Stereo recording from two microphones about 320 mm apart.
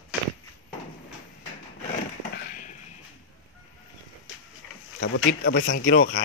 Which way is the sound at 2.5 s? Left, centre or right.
Left.